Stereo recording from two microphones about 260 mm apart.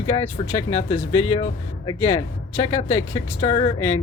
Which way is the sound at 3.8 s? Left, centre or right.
Left.